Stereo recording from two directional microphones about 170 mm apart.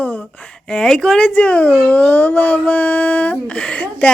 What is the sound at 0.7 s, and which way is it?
A child's voice, 5° left (ahead or behind).